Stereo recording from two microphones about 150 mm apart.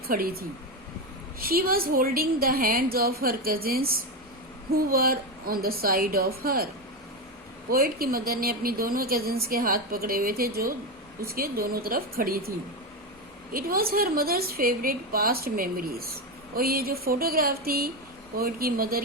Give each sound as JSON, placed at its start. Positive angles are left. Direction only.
{"t": 0.1, "sound": "a woman's voice", "side_deg": -80}
{"t": 4.7, "sound": "a woman's voice", "side_deg": -80}
{"t": 7.7, "sound": "a woman's voice", "side_deg": -80}
{"t": 13.5, "sound": "a woman's voice", "side_deg": -75}